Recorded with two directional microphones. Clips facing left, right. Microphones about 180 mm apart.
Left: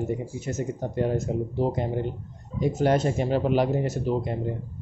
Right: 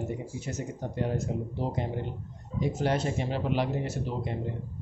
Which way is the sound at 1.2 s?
45° left (ahead or behind).